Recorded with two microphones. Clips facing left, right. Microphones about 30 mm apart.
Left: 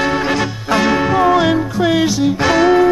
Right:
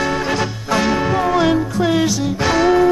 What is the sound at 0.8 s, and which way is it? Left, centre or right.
Music, centre.